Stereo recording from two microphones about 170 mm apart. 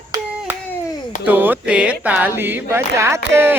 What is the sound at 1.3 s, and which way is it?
Speech, 10° right (ahead or behind).